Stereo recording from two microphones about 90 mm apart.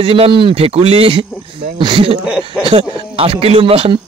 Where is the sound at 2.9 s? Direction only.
90° right.